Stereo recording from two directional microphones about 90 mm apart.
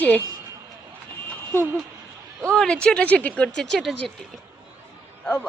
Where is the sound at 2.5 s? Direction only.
10° left (ahead or behind).